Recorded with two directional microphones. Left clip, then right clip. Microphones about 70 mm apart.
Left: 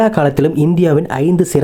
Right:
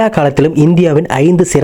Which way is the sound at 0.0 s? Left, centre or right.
Right.